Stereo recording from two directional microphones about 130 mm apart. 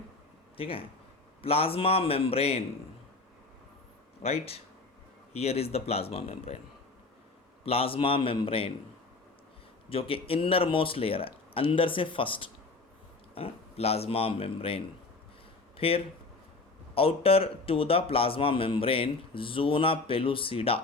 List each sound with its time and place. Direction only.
0.5 s a man's voice: 45° left (ahead or behind)
4.2 s a man's voice: 50° left (ahead or behind)
7.6 s a man's voice: 50° left (ahead or behind)
9.9 s a man's voice: 45° left (ahead or behind)